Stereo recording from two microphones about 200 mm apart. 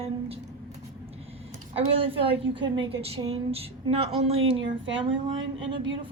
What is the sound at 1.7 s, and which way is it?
A woman's voice, 25° right (ahead or behind).